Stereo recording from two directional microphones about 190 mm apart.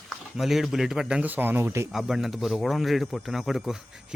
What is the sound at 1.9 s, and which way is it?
Speech, centre (ahead or behind).